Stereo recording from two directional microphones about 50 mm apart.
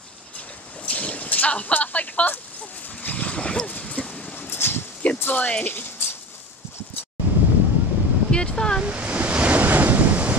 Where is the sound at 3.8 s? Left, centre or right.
Centre.